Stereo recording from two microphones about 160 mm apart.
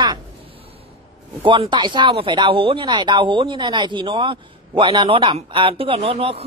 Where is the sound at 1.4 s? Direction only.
30° right (ahead or behind).